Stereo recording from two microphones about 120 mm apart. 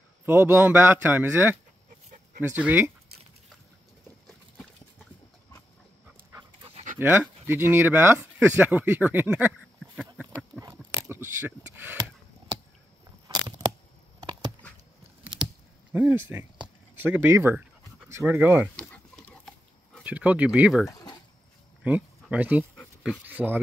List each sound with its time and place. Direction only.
0.2 s a man's voice: 20° right (ahead or behind)
7.0 s speech: 20° right (ahead or behind)
10.6 s a sound: 25° right (ahead or behind)
15.9 s a man's voice: 15° right (ahead or behind)
16.6 s pant: 15° right (ahead or behind)
18.8 s pig: 10° left (ahead or behind)
20.0 s a man's voice: 10° right (ahead or behind)
21.8 s a man's voice: 15° right (ahead or behind)